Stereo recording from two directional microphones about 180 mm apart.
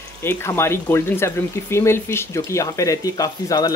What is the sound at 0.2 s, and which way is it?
Speech, 15° left (ahead or behind).